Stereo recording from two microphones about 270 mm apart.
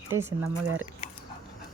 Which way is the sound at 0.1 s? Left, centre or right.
Centre.